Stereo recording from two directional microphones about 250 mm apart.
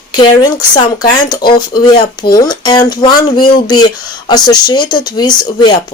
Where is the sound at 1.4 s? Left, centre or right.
Left.